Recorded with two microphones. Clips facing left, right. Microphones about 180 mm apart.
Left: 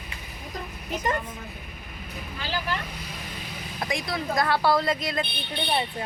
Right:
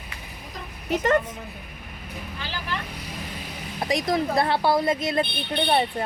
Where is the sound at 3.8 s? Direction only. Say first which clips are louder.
Right 6 dB; 35° right (ahead or behind).